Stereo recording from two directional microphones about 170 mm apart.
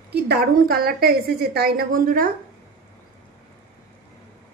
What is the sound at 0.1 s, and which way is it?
A woman's voice, 70° right (ahead or behind).